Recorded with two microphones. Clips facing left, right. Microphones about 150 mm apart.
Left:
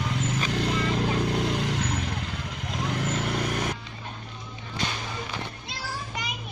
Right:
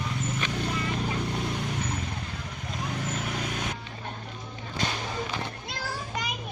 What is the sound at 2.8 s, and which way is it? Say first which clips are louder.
Vehicle: left 4 dB; 75° left (ahead or behind).